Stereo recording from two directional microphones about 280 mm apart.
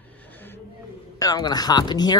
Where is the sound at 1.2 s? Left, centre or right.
Centre.